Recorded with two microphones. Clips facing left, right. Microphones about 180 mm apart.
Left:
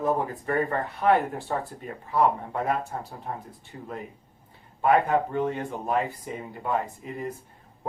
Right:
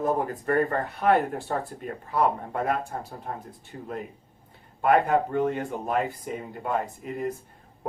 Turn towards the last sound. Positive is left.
turn(degrees=-50)  # may be behind; listen again after turning